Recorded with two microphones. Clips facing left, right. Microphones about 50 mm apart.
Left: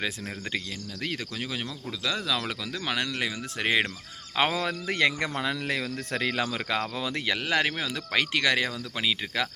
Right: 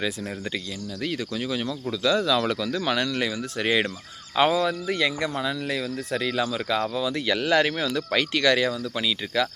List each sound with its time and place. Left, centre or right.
1.0 s speech: left
1.6 s speech: centre; by 4.6 s left
4.6 s speech: left
7.3 s speech: centre